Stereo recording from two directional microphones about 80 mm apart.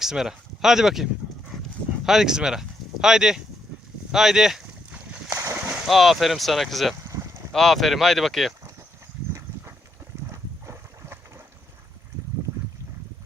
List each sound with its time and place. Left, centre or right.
0.0 s speech: centre
4.1 s a sound: centre
5.3 s a sound: right
5.7 s speech: centre
7.1 s boat: right
7.5 s speech: centre
10.3 s boat: right